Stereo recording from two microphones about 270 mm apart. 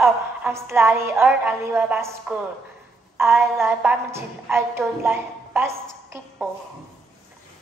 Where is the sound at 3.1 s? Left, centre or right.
Centre.